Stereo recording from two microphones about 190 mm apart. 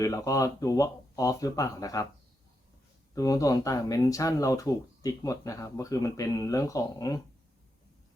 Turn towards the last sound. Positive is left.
turn(degrees=20)  # may be behind; listen again after turning